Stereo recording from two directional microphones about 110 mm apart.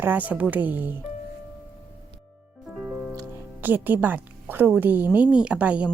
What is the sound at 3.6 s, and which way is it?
A woman's voice, 15° right (ahead or behind).